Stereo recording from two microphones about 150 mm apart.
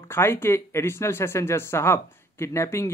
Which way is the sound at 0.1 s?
15° left (ahead or behind).